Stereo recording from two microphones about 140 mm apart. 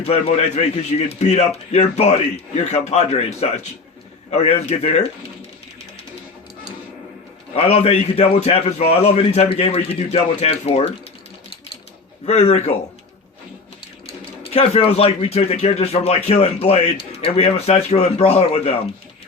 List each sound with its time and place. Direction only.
0.0 s speech: 50° left (ahead or behind)
7.5 s speech: 45° left (ahead or behind)
12.2 s speech: 50° left (ahead or behind)
14.1 s speech: 45° left (ahead or behind)